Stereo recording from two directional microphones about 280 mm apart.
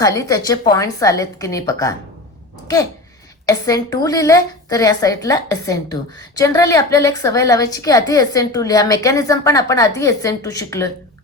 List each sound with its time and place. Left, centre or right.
0.0 s a woman's voice: centre
3.4 s a woman's voice: centre